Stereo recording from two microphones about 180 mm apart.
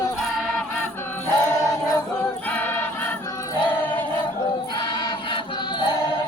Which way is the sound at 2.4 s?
10° left (ahead or behind).